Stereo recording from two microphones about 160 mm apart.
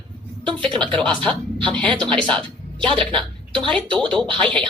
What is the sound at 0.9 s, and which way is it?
A woman's voice, 5° left (ahead or behind).